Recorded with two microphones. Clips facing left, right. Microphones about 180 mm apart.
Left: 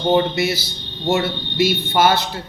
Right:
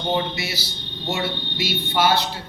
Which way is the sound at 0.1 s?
50° left (ahead or behind).